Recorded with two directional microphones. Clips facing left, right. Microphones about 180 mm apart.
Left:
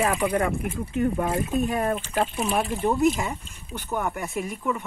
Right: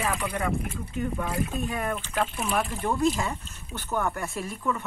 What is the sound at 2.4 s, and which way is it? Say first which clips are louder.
Speech: left 4 dB; 20° left (ahead or behind).